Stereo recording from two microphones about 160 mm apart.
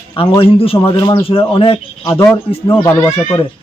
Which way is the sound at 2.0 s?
15° left (ahead or behind).